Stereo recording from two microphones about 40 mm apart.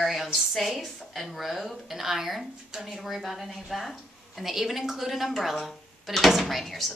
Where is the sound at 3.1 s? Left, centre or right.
Centre.